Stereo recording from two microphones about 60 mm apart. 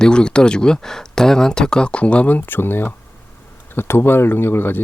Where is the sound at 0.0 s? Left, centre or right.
Centre.